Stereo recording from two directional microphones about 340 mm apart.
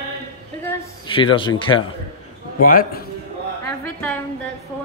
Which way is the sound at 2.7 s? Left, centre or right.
Left.